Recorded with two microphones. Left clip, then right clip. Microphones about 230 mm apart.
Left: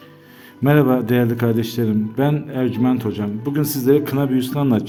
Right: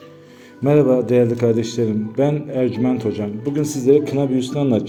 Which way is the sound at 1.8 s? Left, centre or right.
Left.